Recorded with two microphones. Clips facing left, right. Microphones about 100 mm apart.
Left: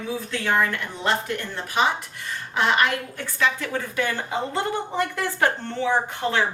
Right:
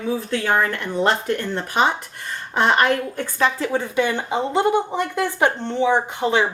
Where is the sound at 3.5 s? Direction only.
25° right (ahead or behind).